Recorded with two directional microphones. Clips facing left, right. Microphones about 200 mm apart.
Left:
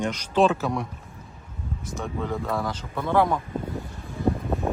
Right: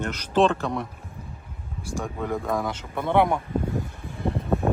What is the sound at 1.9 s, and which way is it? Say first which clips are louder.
Speech: right 1 dB; 10° right (ahead or behind).